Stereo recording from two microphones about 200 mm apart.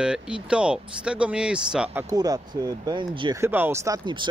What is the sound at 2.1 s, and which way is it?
Speech, 20° right (ahead or behind).